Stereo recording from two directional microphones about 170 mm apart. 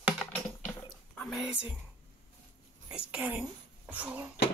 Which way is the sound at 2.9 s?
5° right (ahead or behind).